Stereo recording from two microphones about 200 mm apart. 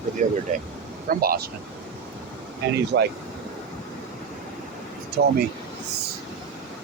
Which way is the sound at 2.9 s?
55° right (ahead or behind).